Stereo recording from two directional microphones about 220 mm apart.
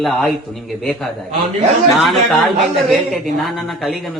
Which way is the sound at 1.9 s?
Centre (ahead or behind).